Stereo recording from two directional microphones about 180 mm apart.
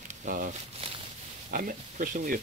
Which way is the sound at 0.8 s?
30° right (ahead or behind).